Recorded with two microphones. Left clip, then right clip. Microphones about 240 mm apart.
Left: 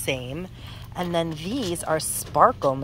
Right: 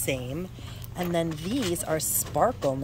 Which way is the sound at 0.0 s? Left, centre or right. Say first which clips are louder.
Left 2 dB; centre.